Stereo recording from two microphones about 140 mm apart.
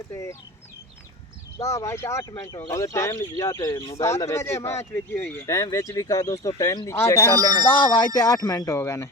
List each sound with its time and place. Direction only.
0.1 s speech: 20° left (ahead or behind)
1.5 s speech: 20° left (ahead or behind)
7.3 s speech: 30° right (ahead or behind)
7.9 s speech: 25° left (ahead or behind)